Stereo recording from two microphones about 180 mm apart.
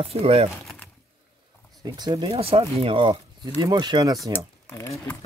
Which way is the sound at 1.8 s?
25° right (ahead or behind).